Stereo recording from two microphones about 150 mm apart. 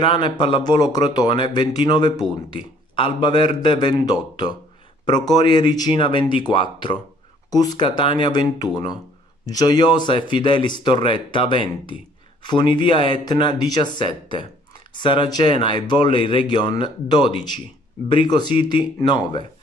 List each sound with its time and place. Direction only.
0.0 s speech: 30° left (ahead or behind)